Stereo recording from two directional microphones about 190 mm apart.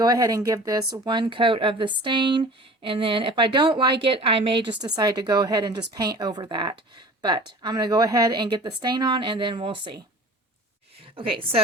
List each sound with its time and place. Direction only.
0.0 s speech: 20° right (ahead or behind)
11.0 s a woman's voice: 30° right (ahead or behind)